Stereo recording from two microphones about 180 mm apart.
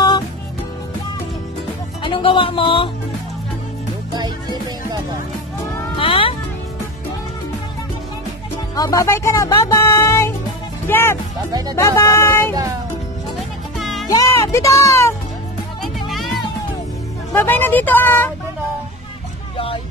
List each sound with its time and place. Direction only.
2.0 s speech: 30° left (ahead or behind)
4.1 s music: 25° right (ahead or behind)
5.9 s music: 30° left (ahead or behind)
8.7 s speech: 20° left (ahead or behind)
13.7 s music: centre (ahead or behind)
14.0 s speech: 20° left (ahead or behind)
15.8 s music: centre (ahead or behind)
17.3 s speech: 10° left (ahead or behind)
19.5 s music: 30° left (ahead or behind)